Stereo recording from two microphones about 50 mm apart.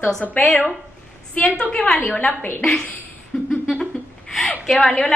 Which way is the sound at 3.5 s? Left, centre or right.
Centre.